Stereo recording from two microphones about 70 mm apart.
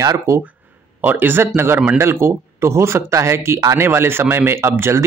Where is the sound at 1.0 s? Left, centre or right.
Right.